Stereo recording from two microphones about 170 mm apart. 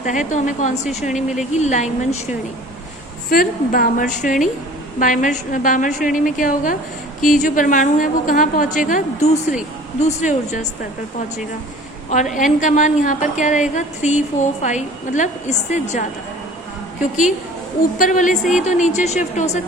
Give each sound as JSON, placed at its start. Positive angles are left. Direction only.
{"t": 0.0, "sound": "a woman's voice", "side_deg": 45}
{"t": 3.2, "sound": "a woman's voice", "side_deg": 60}
{"t": 12.1, "sound": "a woman's voice", "side_deg": 45}
{"t": 17.9, "sound": "a woman's voice", "side_deg": 50}